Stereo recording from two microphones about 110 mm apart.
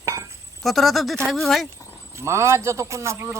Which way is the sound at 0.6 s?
Centre (ahead or behind).